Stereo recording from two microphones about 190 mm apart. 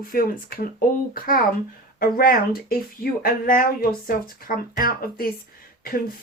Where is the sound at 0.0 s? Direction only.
50° left (ahead or behind).